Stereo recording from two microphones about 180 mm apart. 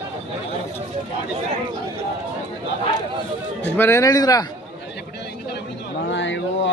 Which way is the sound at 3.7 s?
15° left (ahead or behind).